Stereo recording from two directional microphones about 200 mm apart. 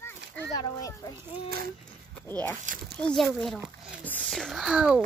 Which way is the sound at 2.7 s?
40° right (ahead or behind).